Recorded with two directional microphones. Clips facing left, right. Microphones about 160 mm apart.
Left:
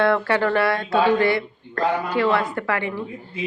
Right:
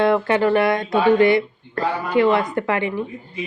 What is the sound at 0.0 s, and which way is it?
Speech, 20° right (ahead or behind).